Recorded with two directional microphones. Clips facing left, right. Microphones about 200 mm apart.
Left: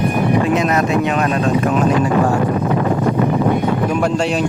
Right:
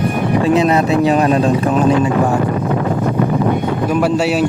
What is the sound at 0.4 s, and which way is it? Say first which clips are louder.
Speech: right 3 dB; 30° right (ahead or behind).